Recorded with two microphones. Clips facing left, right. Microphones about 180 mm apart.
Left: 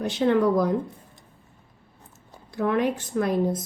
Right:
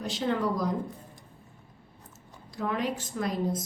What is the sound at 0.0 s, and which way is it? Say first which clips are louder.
Speech: left 8 dB; 60° left (ahead or behind).